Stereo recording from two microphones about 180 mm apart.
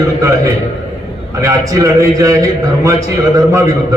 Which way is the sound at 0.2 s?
15° right (ahead or behind).